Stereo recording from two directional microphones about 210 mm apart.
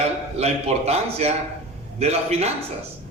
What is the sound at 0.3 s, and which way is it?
A man's voice, 30° right (ahead or behind).